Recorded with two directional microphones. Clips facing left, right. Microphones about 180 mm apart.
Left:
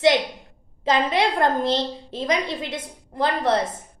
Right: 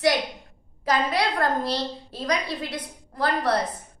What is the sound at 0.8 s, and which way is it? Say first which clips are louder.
A woman's voice: left 3 dB; 25° left (ahead or behind).